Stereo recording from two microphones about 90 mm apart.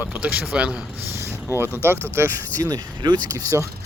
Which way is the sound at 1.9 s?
25° right (ahead or behind).